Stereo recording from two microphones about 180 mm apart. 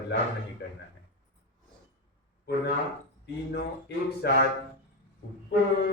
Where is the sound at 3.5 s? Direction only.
70° left (ahead or behind).